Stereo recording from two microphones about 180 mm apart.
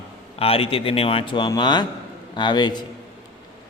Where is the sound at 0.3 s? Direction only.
30° left (ahead or behind).